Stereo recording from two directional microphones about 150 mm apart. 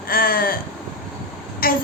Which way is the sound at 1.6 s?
75° left (ahead or behind).